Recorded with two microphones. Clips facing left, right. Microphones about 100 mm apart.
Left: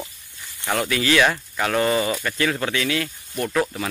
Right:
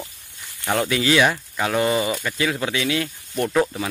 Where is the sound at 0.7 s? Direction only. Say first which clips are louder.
Right 1 dB; 20° right (ahead or behind).